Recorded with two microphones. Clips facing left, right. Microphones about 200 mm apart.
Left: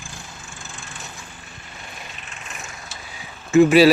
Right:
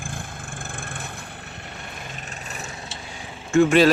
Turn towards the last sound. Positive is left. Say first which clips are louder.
# left 3 dB
turn(degrees=5)  # may be behind; listen again after turning